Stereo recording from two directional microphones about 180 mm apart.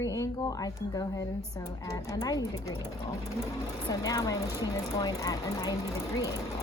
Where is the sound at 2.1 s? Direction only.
20° left (ahead or behind).